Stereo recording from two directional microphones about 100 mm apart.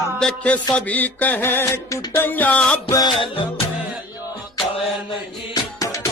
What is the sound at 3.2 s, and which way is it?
Music, 65° left (ahead or behind).